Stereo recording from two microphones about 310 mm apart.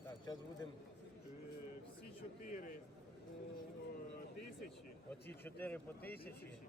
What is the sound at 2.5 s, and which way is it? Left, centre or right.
Speech, left.